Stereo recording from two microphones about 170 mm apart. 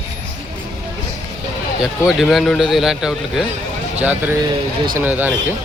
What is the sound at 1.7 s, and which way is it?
Speech, centre (ahead or behind).